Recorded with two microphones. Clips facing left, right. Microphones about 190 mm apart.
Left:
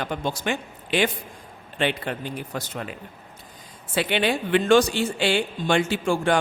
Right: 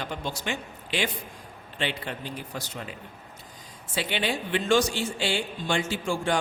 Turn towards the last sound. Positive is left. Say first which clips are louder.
# left 5 dB
turn(degrees=65)  # may be behind; listen again after turning